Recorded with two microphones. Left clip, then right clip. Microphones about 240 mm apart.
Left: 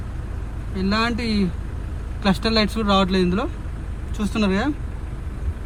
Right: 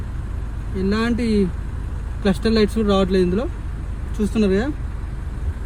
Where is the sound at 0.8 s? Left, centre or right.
Centre.